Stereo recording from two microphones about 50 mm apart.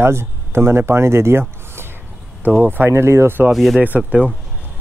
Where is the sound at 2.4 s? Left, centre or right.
Right.